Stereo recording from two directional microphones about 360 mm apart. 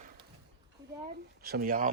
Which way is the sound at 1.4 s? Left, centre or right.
Right.